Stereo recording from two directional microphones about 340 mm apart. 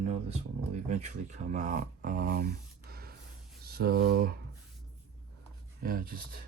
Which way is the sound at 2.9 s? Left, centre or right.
Right.